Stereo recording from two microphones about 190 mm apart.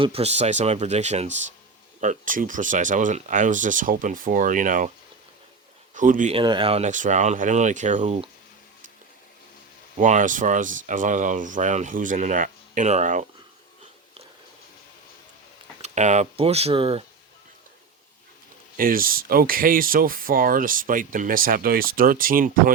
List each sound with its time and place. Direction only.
0.0 s speech: 30° right (ahead or behind)
5.9 s speech: 40° right (ahead or behind)
6.3 s speech: 25° right (ahead or behind)
10.0 s speech: 40° right (ahead or behind)
15.8 s speech: 40° right (ahead or behind)
18.8 s speech: 50° right (ahead or behind)